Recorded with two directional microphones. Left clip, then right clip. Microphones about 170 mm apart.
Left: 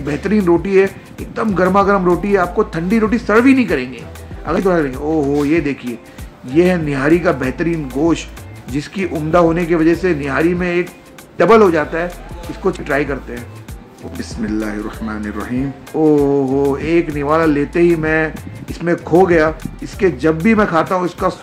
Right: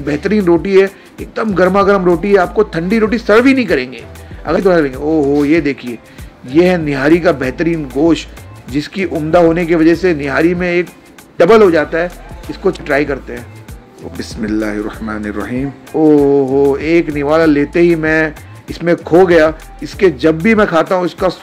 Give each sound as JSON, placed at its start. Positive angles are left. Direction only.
{"t": 0.0, "sound": "speech", "side_deg": -10}
{"t": 14.2, "sound": "speech", "side_deg": -20}
{"t": 15.9, "sound": "speech", "side_deg": -5}